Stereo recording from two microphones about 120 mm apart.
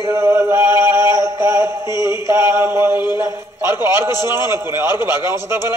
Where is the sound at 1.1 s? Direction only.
20° right (ahead or behind).